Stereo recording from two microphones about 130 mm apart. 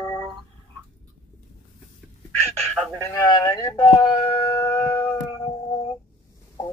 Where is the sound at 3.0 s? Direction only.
20° left (ahead or behind).